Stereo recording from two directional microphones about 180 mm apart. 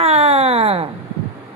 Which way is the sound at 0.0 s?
35° right (ahead or behind).